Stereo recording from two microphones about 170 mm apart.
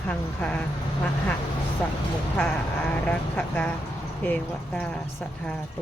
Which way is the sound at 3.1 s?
10° left (ahead or behind).